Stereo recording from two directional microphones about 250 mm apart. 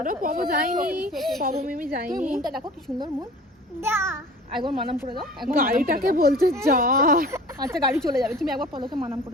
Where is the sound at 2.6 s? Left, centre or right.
Centre.